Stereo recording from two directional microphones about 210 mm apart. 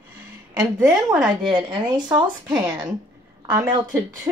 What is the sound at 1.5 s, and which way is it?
A woman's voice, 20° right (ahead or behind).